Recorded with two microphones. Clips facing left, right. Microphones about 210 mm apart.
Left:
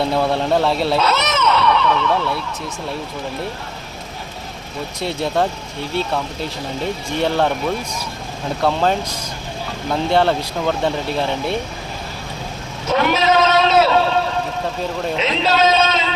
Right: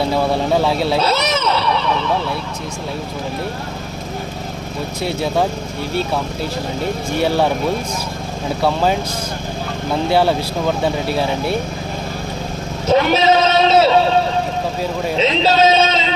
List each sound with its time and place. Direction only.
0.0 s speech: centre (ahead or behind)
0.9 s a sound: 30° right (ahead or behind)
5.0 s speech: 5° right (ahead or behind)
7.2 s speech: 5° right (ahead or behind)
8.6 s speech: 5° right (ahead or behind)
12.9 s a sound: 30° right (ahead or behind)
15.2 s speech: 30° right (ahead or behind)